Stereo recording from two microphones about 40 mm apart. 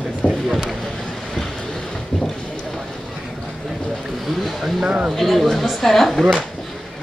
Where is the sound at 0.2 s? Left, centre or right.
Left.